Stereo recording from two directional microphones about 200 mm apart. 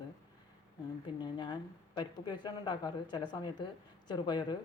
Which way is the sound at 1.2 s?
20° left (ahead or behind).